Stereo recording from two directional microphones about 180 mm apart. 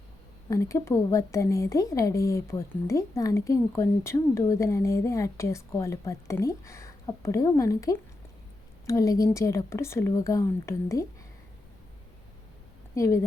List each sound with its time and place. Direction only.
0.5 s a woman's voice: 15° left (ahead or behind)